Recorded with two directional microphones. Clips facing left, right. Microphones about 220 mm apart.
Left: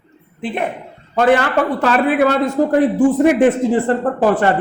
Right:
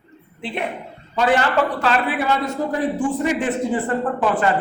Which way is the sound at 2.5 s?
60° left (ahead or behind).